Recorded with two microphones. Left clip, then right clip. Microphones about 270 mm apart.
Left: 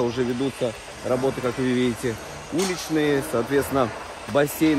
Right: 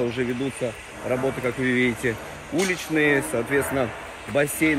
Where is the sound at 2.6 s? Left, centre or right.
Left.